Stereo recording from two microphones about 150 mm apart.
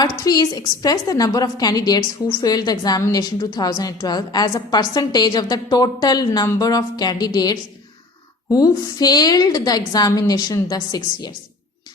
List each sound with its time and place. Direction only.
0.0 s a woman's voice: 25° left (ahead or behind)